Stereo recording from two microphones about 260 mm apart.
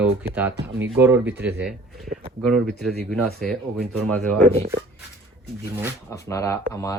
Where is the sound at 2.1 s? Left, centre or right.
Right.